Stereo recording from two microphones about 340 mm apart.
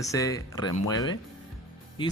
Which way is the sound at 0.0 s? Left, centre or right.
Centre.